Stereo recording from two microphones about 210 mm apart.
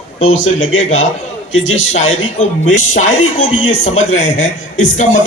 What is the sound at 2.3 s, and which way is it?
Speech, 35° left (ahead or behind).